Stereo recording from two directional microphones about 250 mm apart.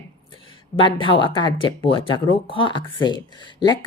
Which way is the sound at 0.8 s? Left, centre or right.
Centre.